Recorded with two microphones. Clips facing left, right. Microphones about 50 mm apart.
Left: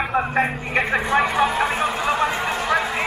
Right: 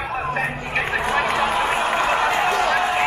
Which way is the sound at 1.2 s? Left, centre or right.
Right.